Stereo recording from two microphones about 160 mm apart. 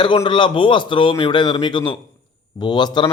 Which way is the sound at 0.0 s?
30° left (ahead or behind).